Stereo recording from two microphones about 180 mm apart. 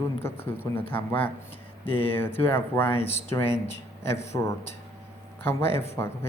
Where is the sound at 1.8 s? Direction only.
30° left (ahead or behind).